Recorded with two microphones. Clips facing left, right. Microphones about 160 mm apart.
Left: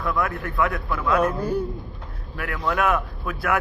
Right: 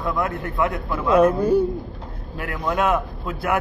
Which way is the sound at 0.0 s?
20° right (ahead or behind).